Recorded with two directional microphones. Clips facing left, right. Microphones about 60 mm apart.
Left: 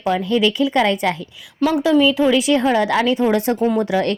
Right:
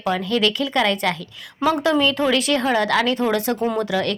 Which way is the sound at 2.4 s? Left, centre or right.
Centre.